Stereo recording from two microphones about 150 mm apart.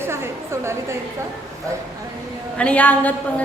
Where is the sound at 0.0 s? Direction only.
15° right (ahead or behind).